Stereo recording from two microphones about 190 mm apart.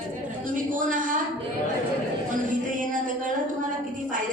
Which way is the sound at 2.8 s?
45° right (ahead or behind).